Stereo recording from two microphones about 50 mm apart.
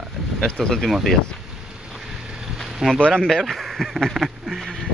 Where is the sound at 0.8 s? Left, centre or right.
Centre.